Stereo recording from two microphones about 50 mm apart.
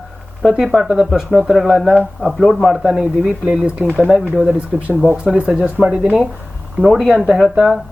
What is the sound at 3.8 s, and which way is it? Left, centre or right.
Speech, left.